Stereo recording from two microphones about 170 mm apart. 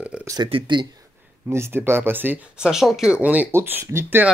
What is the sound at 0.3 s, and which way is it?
Speech, 30° right (ahead or behind).